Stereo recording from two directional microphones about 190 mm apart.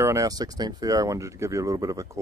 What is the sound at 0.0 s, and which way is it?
Speech, 15° right (ahead or behind).